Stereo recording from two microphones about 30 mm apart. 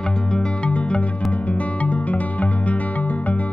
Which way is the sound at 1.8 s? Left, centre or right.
Left.